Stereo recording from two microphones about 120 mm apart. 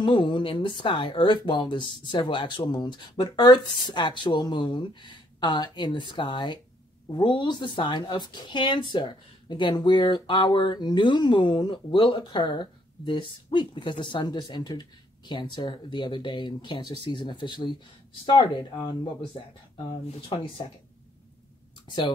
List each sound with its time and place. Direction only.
0.0 s speech: 40° left (ahead or behind)
21.8 s speech: 40° left (ahead or behind)